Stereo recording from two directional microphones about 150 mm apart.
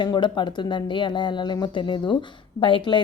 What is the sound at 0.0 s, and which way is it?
A woman's voice, 30° left (ahead or behind).